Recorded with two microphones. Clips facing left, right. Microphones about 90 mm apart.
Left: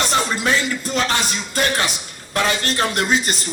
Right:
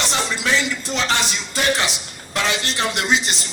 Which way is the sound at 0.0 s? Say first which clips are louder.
Left 3 dB; 45° left (ahead or behind).